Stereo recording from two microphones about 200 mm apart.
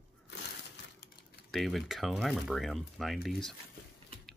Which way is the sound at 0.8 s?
60° left (ahead or behind).